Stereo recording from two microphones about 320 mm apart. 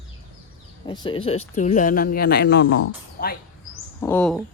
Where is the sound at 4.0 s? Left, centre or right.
Centre.